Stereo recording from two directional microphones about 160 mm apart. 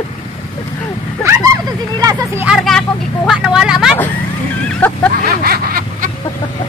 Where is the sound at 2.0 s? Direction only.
20° right (ahead or behind).